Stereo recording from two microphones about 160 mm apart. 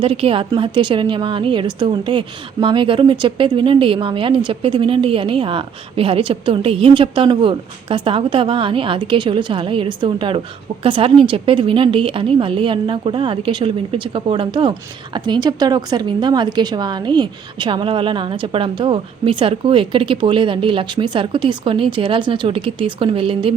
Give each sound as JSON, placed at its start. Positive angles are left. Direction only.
{"t": 0.0, "sound": "a woman's voice", "side_deg": -35}